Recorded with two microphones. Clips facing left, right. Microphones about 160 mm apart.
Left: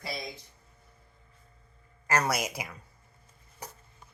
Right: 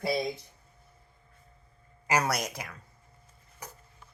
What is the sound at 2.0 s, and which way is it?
Speech, 10° right (ahead or behind).